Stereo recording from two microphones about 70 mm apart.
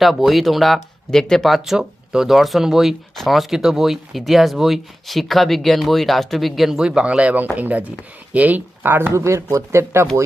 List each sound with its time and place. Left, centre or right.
0.0 s speech: centre; by 9.1 s right
9.1 s speech: right